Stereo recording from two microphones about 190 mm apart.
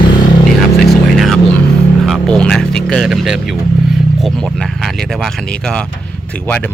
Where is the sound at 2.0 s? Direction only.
5° left (ahead or behind).